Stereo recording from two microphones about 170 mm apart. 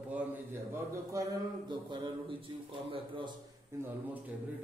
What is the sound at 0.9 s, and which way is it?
Speech, 20° right (ahead or behind).